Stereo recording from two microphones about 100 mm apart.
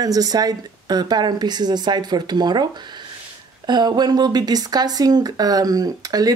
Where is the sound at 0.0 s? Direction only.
40° right (ahead or behind).